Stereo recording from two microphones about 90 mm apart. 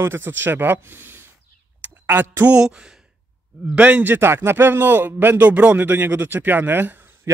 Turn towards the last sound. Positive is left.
turn(degrees=-25)  # may be behind; listen again after turning